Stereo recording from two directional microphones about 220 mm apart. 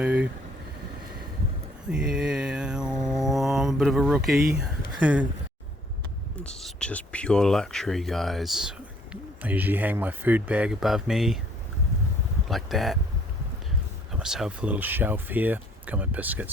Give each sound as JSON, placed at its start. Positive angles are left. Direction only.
{"t": 0.0, "sound": "speech", "side_deg": -5}
{"t": 1.9, "sound": "mantra", "side_deg": -5}
{"t": 4.5, "sound": "a sound", "side_deg": -5}
{"t": 6.4, "sound": "speech", "side_deg": 0}
{"t": 12.5, "sound": "speech", "side_deg": 0}
{"t": 14.1, "sound": "speech", "side_deg": 0}